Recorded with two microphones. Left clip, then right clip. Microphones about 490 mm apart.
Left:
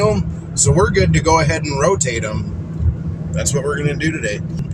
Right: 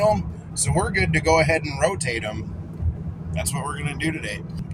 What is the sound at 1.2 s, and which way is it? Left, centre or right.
Speech, right.